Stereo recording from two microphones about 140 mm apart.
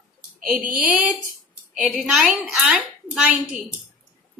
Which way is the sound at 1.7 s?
5° right (ahead or behind).